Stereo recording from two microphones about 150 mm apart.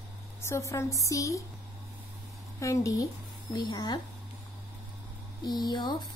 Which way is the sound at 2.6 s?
20° left (ahead or behind).